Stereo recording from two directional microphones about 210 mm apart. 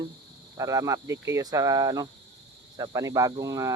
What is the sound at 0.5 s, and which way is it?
Speech, 15° right (ahead or behind).